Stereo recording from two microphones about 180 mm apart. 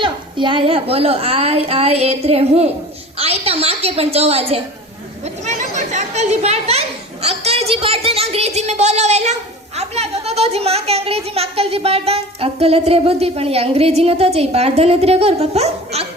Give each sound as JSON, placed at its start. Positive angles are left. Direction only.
{"t": 0.0, "sound": "a woman's voice", "side_deg": -25}